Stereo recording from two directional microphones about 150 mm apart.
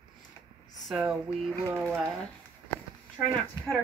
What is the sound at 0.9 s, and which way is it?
Speech, 10° right (ahead or behind).